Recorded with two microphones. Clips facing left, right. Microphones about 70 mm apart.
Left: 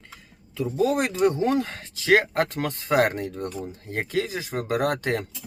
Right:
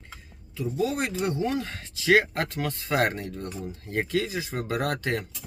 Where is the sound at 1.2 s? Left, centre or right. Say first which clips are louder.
Left 8 dB; left.